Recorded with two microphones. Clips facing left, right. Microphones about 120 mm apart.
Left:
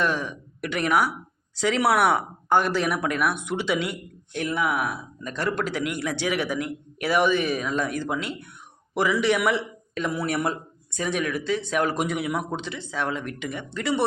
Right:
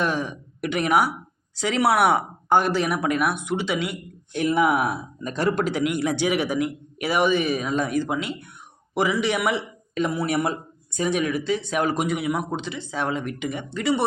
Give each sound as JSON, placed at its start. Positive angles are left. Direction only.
{"t": 0.0, "sound": "a man's voice", "side_deg": -10}
{"t": 4.3, "sound": "a man's voice", "side_deg": -15}
{"t": 12.9, "sound": "speech", "side_deg": -15}